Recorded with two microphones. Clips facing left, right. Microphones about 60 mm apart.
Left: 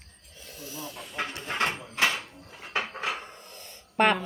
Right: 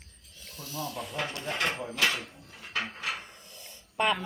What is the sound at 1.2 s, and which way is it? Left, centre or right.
Speech, left.